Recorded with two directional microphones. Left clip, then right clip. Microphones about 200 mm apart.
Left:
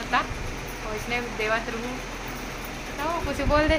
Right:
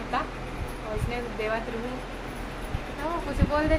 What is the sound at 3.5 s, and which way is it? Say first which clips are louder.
Speech: left 4 dB; 20° left (ahead or behind).